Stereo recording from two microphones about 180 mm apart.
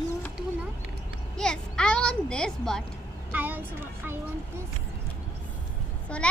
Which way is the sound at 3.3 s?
10° right (ahead or behind).